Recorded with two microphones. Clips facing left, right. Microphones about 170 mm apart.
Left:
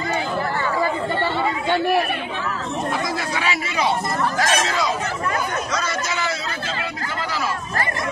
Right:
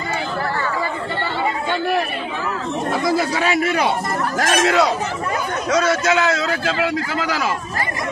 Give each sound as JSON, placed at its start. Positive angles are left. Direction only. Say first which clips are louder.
{"t": 3.3, "sound": "speech", "louder": "right 5 dB", "side_deg": -50}
{"t": 6.0, "sound": "speech", "louder": "right 8 dB", "side_deg": -80}